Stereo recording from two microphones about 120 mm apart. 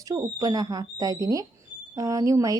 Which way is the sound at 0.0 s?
30° right (ahead or behind).